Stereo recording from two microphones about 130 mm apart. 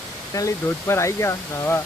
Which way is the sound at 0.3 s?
20° left (ahead or behind).